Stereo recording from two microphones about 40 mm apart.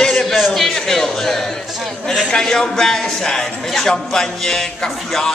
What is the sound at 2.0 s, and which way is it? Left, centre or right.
A man's voice, centre.